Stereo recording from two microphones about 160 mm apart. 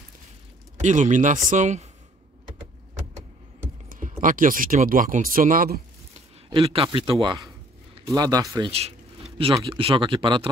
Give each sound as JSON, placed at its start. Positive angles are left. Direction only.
{"t": 0.7, "sound": "a man's voice", "side_deg": -50}
{"t": 3.9, "sound": "speech", "side_deg": -60}
{"t": 6.5, "sound": "a man's voice", "side_deg": -35}
{"t": 8.7, "sound": "a sound", "side_deg": -40}
{"t": 9.7, "sound": "speech", "side_deg": -35}